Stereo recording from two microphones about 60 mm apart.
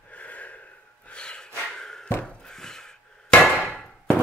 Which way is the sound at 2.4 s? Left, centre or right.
Centre.